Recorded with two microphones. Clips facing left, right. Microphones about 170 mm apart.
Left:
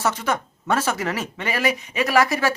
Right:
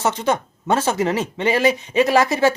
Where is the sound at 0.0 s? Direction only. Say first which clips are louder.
Right 3 dB; 20° right (ahead or behind).